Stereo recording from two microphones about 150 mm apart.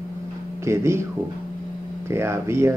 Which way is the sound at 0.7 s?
20° right (ahead or behind).